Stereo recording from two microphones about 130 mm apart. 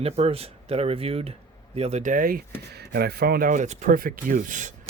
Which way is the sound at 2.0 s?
85° right.